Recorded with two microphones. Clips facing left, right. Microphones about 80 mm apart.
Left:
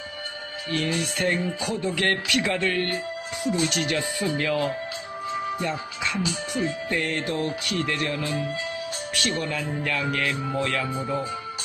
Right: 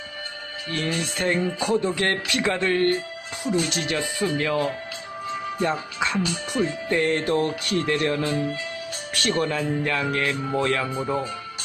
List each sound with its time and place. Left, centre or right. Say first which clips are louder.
0.8 s speech: even; right